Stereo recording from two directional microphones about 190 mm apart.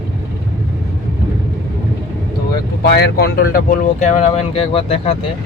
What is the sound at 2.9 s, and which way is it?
Speech, 60° left (ahead or behind).